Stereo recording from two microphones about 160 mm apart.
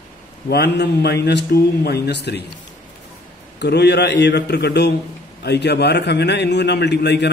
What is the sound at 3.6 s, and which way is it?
Speech, 90° left.